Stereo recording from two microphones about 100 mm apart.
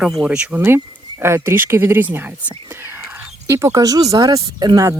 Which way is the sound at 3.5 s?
30° right (ahead or behind).